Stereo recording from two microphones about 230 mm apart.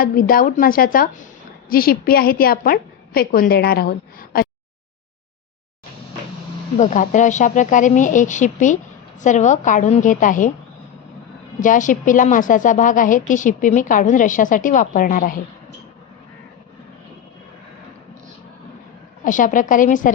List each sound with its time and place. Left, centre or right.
0.0 s a woman's voice: left
6.7 s a woman's voice: left
11.6 s a woman's voice: left
19.2 s a woman's voice: left